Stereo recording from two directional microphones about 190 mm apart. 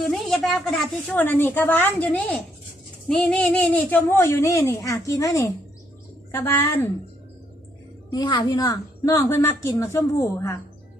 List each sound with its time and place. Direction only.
0.1 s a woman's voice: centre (ahead or behind)
8.1 s a woman's voice: 20° left (ahead or behind)